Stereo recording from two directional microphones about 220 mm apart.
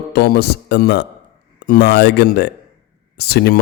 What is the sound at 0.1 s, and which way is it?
A man's voice, 45° left (ahead or behind).